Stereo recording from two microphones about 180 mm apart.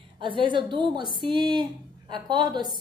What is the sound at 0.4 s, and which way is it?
A woman's voice, 25° right (ahead or behind).